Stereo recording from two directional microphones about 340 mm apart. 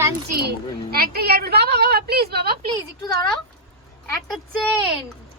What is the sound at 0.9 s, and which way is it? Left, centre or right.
A woman's voice, right.